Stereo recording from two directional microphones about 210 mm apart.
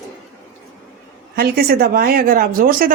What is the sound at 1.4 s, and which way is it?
Speech, 50° right (ahead or behind).